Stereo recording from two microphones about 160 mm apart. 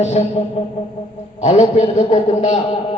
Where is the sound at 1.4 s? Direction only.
45° left (ahead or behind).